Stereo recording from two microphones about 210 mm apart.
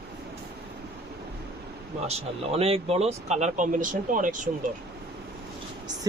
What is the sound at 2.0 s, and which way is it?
Speech, 30° right (ahead or behind).